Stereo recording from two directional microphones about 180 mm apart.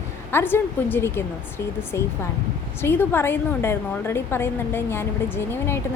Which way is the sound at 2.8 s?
15° left (ahead or behind).